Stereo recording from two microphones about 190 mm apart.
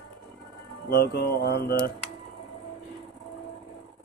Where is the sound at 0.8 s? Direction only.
55° left (ahead or behind).